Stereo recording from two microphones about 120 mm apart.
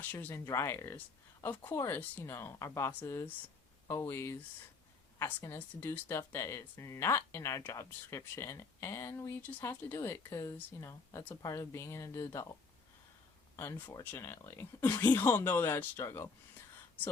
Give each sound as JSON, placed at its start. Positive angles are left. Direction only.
{"t": 0.1, "sound": "speech", "side_deg": 15}
{"t": 13.6, "sound": "speech", "side_deg": 20}